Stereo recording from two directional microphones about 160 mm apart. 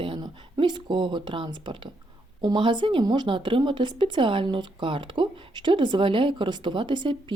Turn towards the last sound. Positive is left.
turn(degrees=-30)  # may be behind; listen again after turning